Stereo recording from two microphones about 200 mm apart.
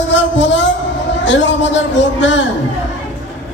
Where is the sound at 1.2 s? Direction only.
65° left (ahead or behind).